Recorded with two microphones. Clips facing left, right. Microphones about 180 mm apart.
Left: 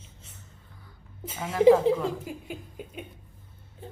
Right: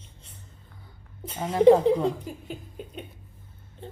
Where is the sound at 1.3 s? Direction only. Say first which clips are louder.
Right 4 dB; 30° right (ahead or behind).